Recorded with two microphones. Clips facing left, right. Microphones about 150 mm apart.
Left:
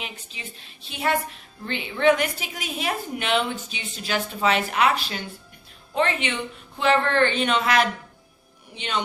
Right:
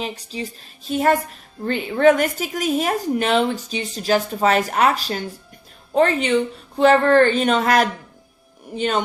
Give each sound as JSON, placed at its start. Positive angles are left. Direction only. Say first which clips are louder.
{"t": 0.0, "sound": "a woman's voice", "louder": "right 10 dB", "side_deg": -35}